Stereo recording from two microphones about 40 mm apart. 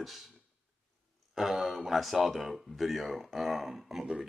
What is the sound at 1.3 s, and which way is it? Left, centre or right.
Speech, centre.